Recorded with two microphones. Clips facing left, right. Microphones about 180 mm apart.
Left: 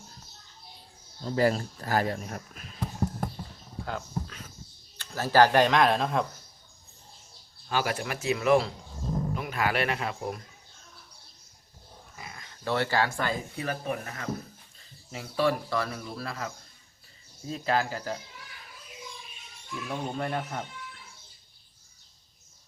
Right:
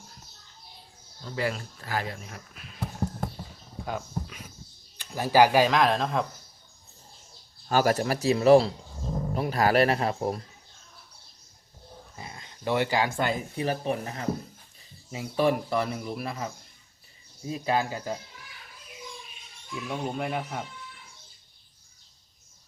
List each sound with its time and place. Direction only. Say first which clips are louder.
1.2 s speech: left 6 dB; 40° left (ahead or behind)
3.8 s speech: right 1 dB; 15° right (ahead or behind)
7.7 s speech: right 6 dB; 40° right (ahead or behind)
12.1 s speech: right 1 dB; 30° right (ahead or behind)
19.9 s speech: right 1 dB; 5° right (ahead or behind)